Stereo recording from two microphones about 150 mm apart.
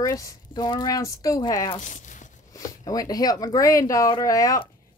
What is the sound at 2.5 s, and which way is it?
Speech, 25° left (ahead or behind).